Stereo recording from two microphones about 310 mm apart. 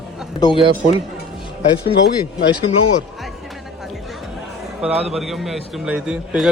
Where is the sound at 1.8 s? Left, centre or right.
Left.